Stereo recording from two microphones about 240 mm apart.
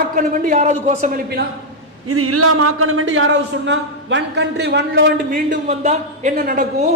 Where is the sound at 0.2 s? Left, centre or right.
Right.